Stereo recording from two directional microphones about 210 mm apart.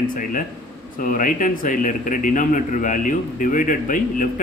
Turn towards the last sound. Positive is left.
turn(degrees=40)  # may be behind; listen again after turning